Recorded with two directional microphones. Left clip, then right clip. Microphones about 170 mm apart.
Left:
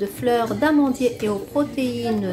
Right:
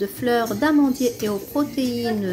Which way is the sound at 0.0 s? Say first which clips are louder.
Left 1 dB; 15° right (ahead or behind).